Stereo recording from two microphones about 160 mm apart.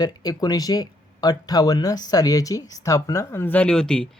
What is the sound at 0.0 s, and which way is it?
Speech, 25° left (ahead or behind).